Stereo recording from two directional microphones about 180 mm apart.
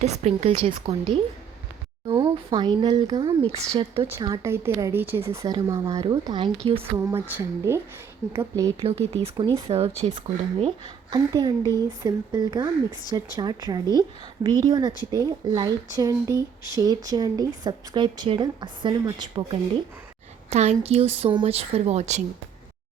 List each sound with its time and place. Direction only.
0.0 s a woman's voice: 35° right (ahead or behind)
4.1 s a woman's voice: 20° right (ahead or behind)
7.1 s a woman's voice: 10° right (ahead or behind)
8.8 s a woman's voice: 35° right (ahead or behind)
20.5 s a woman's voice: 35° right (ahead or behind)